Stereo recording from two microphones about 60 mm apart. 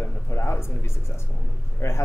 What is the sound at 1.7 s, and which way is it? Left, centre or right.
Speech, left.